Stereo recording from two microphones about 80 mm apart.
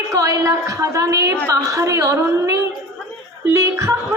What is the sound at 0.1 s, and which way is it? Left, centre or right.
Speech, right.